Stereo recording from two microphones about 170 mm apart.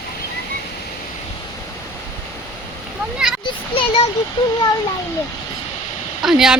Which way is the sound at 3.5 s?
30° left (ahead or behind).